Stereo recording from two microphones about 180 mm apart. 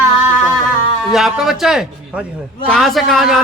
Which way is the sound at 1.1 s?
Centre (ahead or behind).